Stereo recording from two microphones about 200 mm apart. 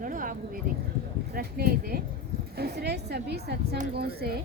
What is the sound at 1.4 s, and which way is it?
A woman's voice, 50° right (ahead or behind).